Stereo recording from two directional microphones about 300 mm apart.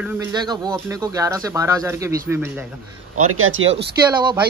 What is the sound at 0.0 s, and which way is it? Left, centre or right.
Speech, centre.